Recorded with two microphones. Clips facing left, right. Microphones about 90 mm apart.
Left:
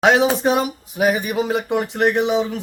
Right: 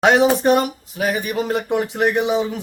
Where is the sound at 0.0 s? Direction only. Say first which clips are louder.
Right 1 dB; centre (ahead or behind).